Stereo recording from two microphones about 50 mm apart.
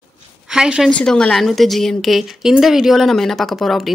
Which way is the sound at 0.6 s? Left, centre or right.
Centre.